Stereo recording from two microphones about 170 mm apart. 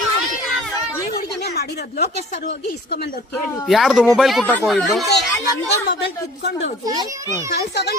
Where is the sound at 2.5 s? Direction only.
75° left (ahead or behind).